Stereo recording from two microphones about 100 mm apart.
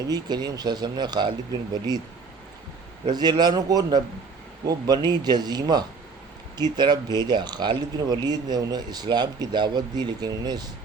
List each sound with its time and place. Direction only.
0.1 s speech: 45° right (ahead or behind)
3.1 s speech: 45° right (ahead or behind)